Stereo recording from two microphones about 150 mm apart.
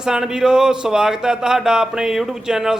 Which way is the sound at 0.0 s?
5° right (ahead or behind).